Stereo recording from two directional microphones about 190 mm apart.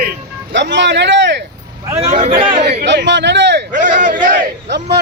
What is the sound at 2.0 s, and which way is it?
Speech, 30° right (ahead or behind).